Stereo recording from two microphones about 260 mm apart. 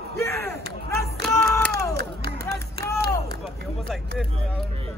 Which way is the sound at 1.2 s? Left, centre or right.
Centre.